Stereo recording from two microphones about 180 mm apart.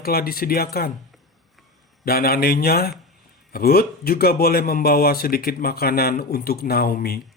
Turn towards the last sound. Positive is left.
turn(degrees=55)  # may be behind; listen again after turning